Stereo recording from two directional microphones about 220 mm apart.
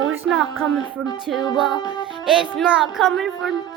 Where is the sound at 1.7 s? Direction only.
20° left (ahead or behind).